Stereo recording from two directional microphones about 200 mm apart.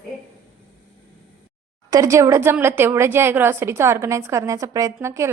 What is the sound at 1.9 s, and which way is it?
A woman's voice, 15° right (ahead or behind).